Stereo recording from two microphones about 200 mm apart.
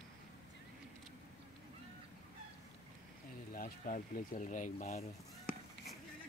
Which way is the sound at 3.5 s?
45° left (ahead or behind).